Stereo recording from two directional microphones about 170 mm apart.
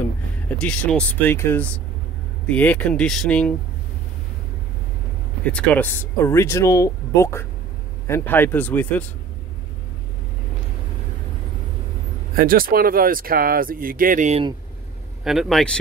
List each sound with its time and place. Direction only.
0.5 s speech: 5° left (ahead or behind)
5.4 s speech: 5° left (ahead or behind)
12.4 s speech: 60° right (ahead or behind)
15.2 s speech: centre (ahead or behind)